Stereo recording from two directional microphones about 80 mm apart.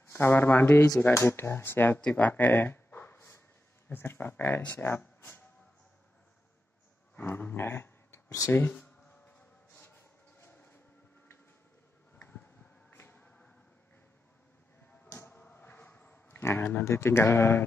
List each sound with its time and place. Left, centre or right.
0.0 s speech: left
2.1 s a sound: left
3.9 s speech: left
7.2 s speech: left
10.5 s train: left
12.9 s music: left
15.0 s a sound: left